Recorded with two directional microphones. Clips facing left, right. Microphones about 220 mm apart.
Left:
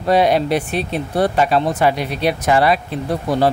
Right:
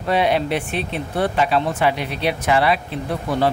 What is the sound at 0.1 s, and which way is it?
Speech, 40° left (ahead or behind).